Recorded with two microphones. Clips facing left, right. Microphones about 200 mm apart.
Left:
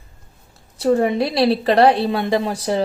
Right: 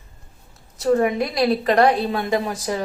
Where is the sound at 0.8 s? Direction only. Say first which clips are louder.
Left 2 dB; 30° left (ahead or behind).